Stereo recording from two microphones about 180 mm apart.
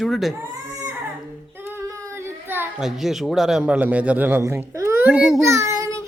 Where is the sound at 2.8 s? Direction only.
Centre (ahead or behind).